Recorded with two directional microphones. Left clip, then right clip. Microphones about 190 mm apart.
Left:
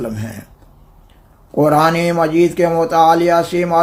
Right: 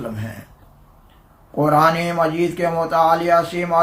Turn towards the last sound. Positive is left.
turn(degrees=50)  # may be behind; listen again after turning